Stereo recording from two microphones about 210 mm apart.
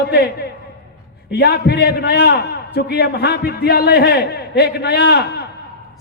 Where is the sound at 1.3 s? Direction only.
50° left (ahead or behind).